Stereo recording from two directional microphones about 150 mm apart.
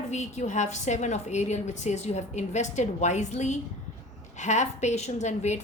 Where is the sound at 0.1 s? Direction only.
50° left (ahead or behind).